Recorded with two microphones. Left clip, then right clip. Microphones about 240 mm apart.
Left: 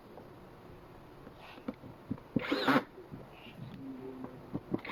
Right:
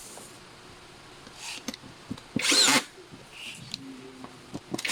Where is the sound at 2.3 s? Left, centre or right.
Right.